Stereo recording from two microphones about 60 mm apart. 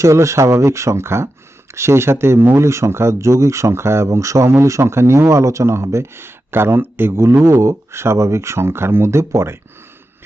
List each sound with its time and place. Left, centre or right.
0.0 s speech: right